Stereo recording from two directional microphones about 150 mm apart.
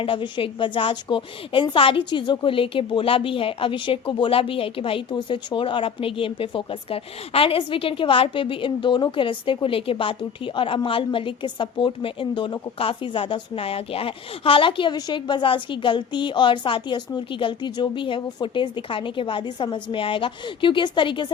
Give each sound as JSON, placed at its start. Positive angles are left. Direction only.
{"t": 0.0, "sound": "a woman's voice", "side_deg": 35}